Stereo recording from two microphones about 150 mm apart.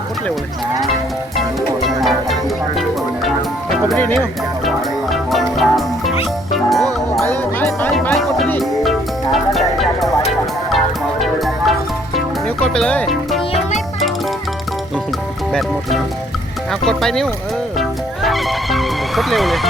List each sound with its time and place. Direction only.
1.4 s music: centre (ahead or behind)
3.9 s speech: 10° left (ahead or behind)
4.6 s music: centre (ahead or behind)
7.2 s music: 15° left (ahead or behind)
8.1 s music: centre (ahead or behind)
16.8 s speech: centre (ahead or behind)
17.7 s music: centre (ahead or behind)